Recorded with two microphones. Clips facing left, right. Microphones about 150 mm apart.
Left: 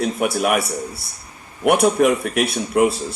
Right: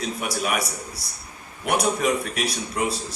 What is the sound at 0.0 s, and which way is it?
Speech, 60° left (ahead or behind).